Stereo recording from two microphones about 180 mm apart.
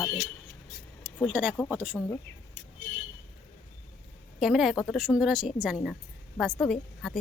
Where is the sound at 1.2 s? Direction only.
5° right (ahead or behind).